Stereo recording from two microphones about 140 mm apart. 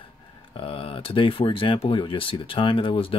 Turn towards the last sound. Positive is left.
turn(degrees=40)  # may be behind; listen again after turning